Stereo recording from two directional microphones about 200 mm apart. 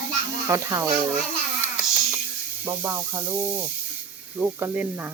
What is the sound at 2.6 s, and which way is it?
Speech, 15° right (ahead or behind).